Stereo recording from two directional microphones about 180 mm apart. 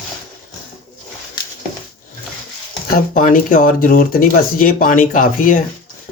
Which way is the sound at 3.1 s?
50° left (ahead or behind).